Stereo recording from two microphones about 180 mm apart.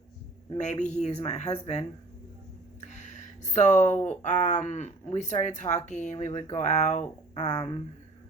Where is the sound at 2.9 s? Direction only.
40° left (ahead or behind).